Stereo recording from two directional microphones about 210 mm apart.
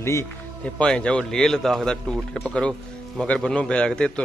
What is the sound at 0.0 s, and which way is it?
A man's voice, 10° left (ahead or behind).